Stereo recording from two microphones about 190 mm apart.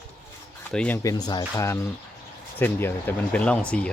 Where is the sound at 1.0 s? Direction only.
20° left (ahead or behind).